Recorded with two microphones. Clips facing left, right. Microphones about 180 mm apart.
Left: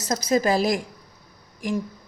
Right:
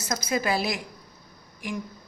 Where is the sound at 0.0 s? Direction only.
40° left (ahead or behind).